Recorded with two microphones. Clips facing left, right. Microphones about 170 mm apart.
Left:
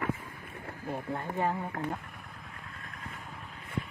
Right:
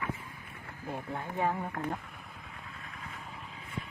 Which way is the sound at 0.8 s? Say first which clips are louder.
Left 3 dB; 15° left (ahead or behind).